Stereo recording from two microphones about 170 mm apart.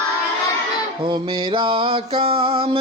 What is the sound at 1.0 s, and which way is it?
Mantra, 30° right (ahead or behind).